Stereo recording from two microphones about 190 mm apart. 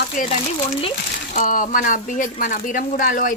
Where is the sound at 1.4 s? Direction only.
45° left (ahead or behind).